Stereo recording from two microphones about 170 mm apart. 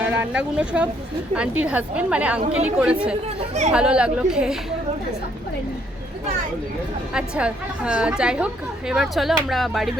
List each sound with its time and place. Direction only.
0.0 s a woman's voice: 10° right (ahead or behind)
3.4 s speech: 40° right (ahead or behind)
3.7 s a woman's voice: 5° right (ahead or behind)
7.1 s a woman's voice: 5° right (ahead or behind)